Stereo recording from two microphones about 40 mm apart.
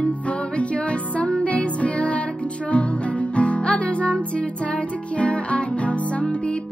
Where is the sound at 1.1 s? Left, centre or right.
Left.